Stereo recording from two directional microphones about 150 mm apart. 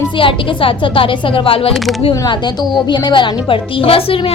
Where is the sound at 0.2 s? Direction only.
35° left (ahead or behind).